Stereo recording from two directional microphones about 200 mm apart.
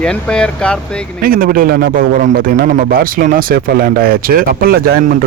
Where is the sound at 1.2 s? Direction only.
45° right (ahead or behind).